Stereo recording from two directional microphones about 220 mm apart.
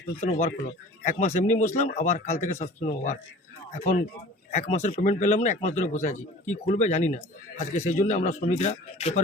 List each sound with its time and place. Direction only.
0.2 s a man's voice: 30° left (ahead or behind)